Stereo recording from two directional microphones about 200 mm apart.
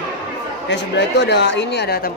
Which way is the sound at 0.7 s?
60° left (ahead or behind).